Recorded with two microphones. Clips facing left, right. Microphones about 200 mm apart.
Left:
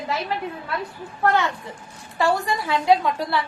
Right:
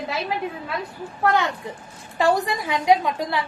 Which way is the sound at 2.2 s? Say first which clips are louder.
Right 1 dB; 15° right (ahead or behind).